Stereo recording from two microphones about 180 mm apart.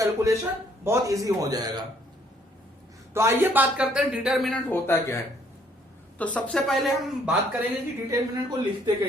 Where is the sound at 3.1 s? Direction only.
15° right (ahead or behind); by 5.1 s 10° left (ahead or behind).